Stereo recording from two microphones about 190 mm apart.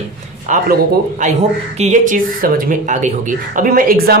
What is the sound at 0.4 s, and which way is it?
Speech, 40° right (ahead or behind).